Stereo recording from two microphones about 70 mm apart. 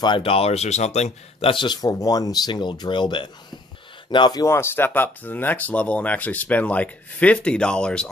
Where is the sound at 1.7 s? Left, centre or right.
Left.